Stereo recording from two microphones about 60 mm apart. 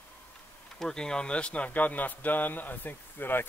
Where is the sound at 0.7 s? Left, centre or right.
Centre.